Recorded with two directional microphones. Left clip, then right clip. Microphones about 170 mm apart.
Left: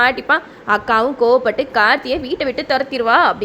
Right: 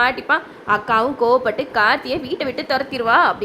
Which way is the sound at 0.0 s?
20° left (ahead or behind).